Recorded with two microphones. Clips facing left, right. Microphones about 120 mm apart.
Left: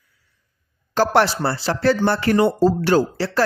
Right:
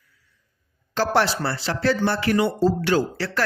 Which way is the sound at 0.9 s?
50° left (ahead or behind).